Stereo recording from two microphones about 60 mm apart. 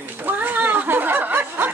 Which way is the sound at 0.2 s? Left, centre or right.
Right.